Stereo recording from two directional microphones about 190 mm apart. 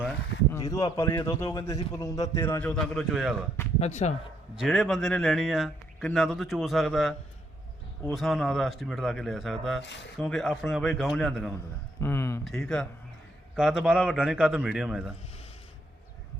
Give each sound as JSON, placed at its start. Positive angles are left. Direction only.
{"t": 0.5, "sound": "a man's voice", "side_deg": 20}
{"t": 3.8, "sound": "speech", "side_deg": 35}
{"t": 4.5, "sound": "speech", "side_deg": 0}
{"t": 11.9, "sound": "a man's voice", "side_deg": 15}
{"t": 12.5, "sound": "speech", "side_deg": 0}